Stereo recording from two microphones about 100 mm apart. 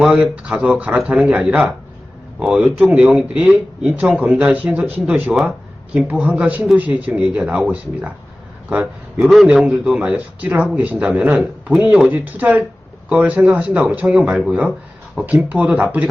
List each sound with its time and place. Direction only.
0.0 s speech: 10° right (ahead or behind)